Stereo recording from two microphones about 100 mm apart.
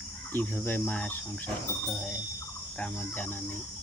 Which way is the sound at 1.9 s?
5° left (ahead or behind).